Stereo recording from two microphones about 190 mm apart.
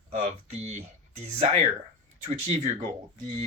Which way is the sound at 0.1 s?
40° right (ahead or behind).